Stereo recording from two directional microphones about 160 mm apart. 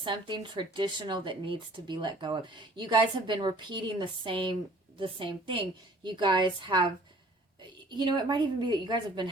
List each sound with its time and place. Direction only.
0.0 s a woman's voice: 30° right (ahead or behind)